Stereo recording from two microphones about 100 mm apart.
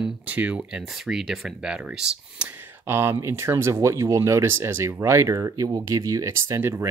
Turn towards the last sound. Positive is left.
turn(degrees=-25)  # may be behind; listen again after turning